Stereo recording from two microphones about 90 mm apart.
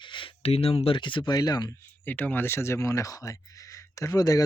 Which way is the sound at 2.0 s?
20° left (ahead or behind).